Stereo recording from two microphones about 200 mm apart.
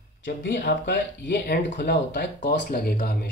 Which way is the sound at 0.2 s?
65° left (ahead or behind).